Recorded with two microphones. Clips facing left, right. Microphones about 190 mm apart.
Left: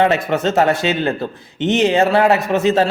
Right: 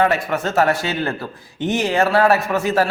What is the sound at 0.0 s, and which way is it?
A man's voice, 25° left (ahead or behind).